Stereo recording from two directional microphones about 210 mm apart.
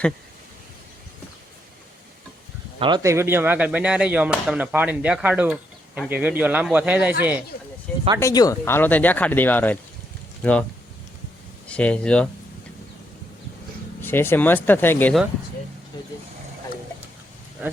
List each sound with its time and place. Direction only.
2.7 s speech: 20° right (ahead or behind); by 7.3 s 5° right (ahead or behind)
7.5 s speech: 40° left (ahead or behind)
8.2 s speech: 15° left (ahead or behind)
11.7 s speech: 5° left (ahead or behind)
14.0 s speech: 10° left (ahead or behind)